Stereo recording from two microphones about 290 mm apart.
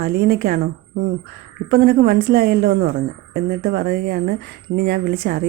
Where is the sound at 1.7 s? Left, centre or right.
Right.